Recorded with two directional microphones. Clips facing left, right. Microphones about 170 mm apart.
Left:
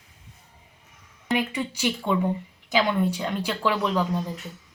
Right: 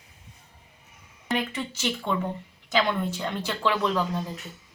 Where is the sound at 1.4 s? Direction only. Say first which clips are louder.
Left 3 dB; 10° left (ahead or behind).